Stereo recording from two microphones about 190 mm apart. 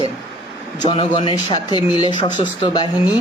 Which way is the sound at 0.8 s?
25° left (ahead or behind).